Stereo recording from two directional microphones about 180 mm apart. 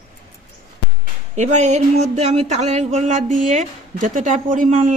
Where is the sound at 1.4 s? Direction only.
40° right (ahead or behind).